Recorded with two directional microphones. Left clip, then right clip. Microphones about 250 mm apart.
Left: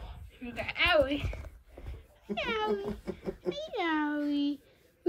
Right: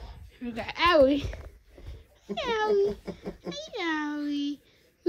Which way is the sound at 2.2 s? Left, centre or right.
Centre.